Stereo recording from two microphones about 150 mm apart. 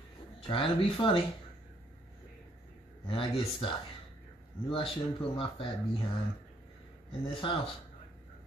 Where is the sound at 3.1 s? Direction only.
35° left (ahead or behind).